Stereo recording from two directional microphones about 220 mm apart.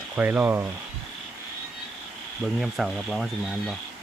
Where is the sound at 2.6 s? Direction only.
Centre (ahead or behind).